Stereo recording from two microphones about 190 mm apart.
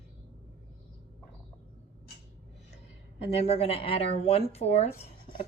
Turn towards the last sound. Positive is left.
turn(degrees=35)  # may be behind; listen again after turning